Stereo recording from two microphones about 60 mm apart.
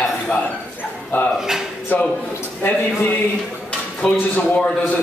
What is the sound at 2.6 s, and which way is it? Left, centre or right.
Speech, left.